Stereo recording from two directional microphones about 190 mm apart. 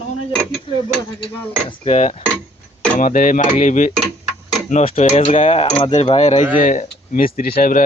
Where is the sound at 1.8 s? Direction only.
35° left (ahead or behind).